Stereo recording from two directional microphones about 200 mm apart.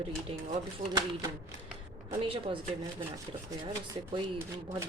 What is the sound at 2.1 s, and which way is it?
Speech, 25° right (ahead or behind).